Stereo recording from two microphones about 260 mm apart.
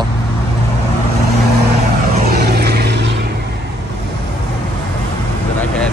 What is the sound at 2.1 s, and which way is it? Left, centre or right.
Vehicle, right.